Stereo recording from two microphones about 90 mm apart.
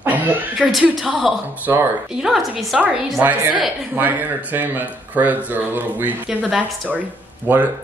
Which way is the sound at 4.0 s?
20° right (ahead or behind).